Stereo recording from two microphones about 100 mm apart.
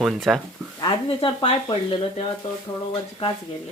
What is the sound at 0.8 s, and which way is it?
Speech, 55° left (ahead or behind).